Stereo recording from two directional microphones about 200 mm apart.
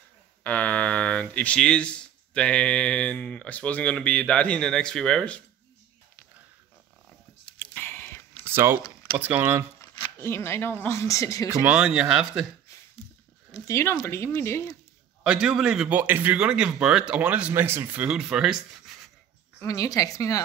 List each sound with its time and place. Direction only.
0.4 s speech: 5° left (ahead or behind)
7.5 s a sound: 10° left (ahead or behind)
8.5 s speech: 10° right (ahead or behind)
9.8 s speech: 15° left (ahead or behind)
11.4 s speech: 10° right (ahead or behind)
13.5 s speech: 15° left (ahead or behind)
15.2 s speech: 5° right (ahead or behind)
19.6 s speech: 15° left (ahead or behind)